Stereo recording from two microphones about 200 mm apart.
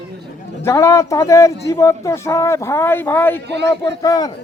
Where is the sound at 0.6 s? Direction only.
15° left (ahead or behind).